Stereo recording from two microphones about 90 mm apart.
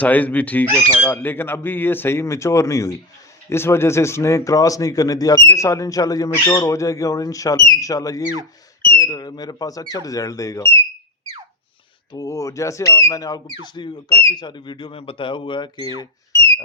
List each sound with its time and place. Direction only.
0.0 s speech: 15° left (ahead or behind)
12.1 s speech: 35° left (ahead or behind); by 15.9 s 60° left (ahead or behind)